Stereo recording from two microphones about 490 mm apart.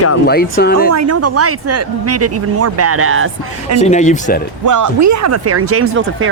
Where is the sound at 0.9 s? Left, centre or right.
Right.